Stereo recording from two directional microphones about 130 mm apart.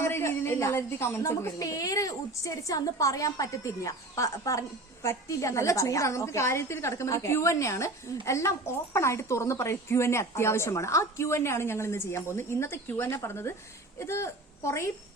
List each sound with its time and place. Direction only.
0.0 s a woman's voice: 20° left (ahead or behind)